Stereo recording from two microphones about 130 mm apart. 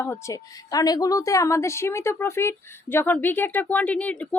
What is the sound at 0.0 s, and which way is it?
Speech, 20° left (ahead or behind).